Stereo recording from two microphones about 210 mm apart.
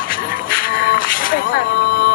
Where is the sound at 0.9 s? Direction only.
40° left (ahead or behind).